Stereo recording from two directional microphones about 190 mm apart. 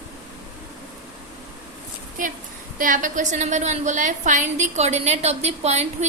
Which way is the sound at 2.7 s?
45° right (ahead or behind).